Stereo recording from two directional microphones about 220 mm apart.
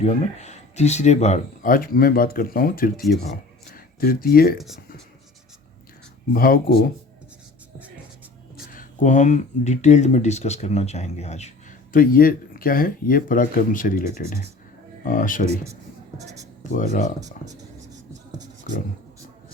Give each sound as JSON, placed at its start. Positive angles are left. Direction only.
{"t": 0.0, "sound": "speech", "side_deg": 30}
{"t": 4.0, "sound": "speech", "side_deg": 40}
{"t": 4.5, "sound": "speech", "side_deg": 0}
{"t": 6.3, "sound": "speech", "side_deg": 40}
{"t": 8.5, "sound": "speech", "side_deg": 40}
{"t": 11.9, "sound": "speech", "side_deg": 40}
{"t": 16.1, "sound": "a sound", "side_deg": -15}
{"t": 16.7, "sound": "speech", "side_deg": 35}
{"t": 17.2, "sound": "speech", "side_deg": -15}